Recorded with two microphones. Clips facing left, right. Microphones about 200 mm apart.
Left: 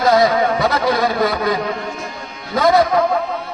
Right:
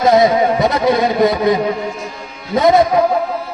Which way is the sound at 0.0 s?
20° right (ahead or behind).